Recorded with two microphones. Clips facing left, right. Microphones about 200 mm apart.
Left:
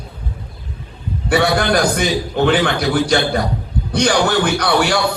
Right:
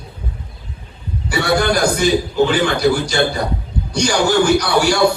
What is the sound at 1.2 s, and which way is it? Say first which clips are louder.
A man's voice: left 1 dB; 55° left (ahead or behind).